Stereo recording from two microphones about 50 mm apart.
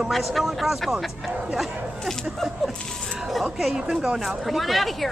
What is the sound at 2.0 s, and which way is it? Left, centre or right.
A woman's voice, centre.